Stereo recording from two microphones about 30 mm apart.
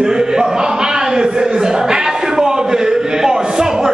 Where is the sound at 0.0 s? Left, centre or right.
Right.